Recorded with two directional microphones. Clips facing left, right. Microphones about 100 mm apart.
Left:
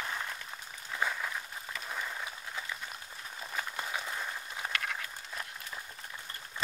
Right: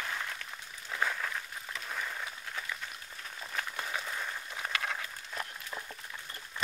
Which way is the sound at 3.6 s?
10° left (ahead or behind).